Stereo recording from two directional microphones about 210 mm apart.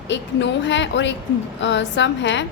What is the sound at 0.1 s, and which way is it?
A woman's voice, 60° left (ahead or behind).